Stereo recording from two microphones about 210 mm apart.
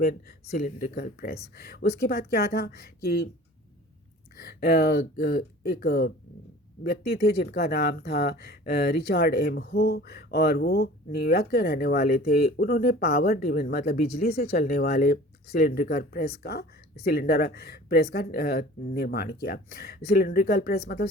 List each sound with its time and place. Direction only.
0.0 s speech: 45° left (ahead or behind)
4.4 s speech: 50° left (ahead or behind)